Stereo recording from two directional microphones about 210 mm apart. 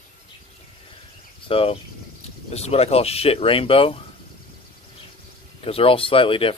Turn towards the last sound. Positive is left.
turn(degrees=25)  # may be behind; listen again after turning